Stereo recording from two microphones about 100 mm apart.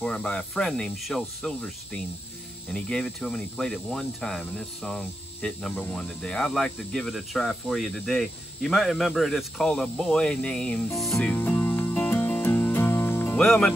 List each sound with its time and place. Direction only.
0.0 s speech: 5° left (ahead or behind)
11.3 s music: 20° left (ahead or behind)
13.4 s speech: 5° left (ahead or behind)